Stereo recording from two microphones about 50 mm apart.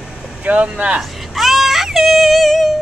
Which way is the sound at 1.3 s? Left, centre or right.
Centre.